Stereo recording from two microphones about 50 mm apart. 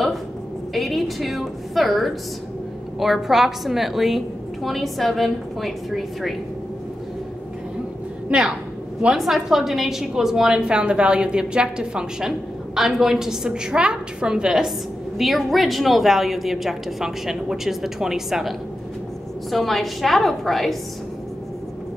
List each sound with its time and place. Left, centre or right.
0.7 s a woman's voice: centre
8.3 s a woman's voice: right
9.1 s a woman's voice: centre
15.1 s a woman's voice: centre
19.5 s a woman's voice: centre